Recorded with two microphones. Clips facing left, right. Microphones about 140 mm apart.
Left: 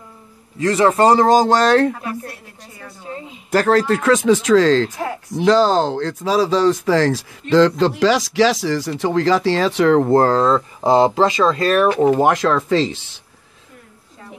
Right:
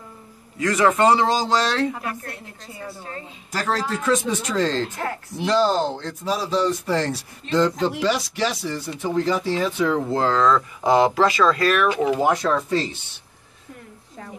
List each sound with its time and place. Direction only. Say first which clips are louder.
0.6 s a man's voice: left 4 dB; 30° left (ahead or behind); by 1.9 s 50° left (ahead or behind)
3.5 s speech: left 10 dB; 65° left (ahead or behind)
10.3 s speech: left 3 dB; 30° left (ahead or behind)
12.2 s speech: left 4 dB; 85° left